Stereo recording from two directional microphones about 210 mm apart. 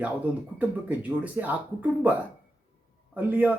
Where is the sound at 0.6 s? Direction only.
5° right (ahead or behind).